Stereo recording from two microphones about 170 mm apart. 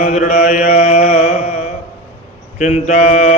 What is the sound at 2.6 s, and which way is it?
Mantra, 45° left (ahead or behind).